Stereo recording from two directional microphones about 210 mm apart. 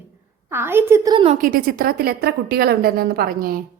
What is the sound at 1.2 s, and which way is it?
A woman's voice, 40° right (ahead or behind).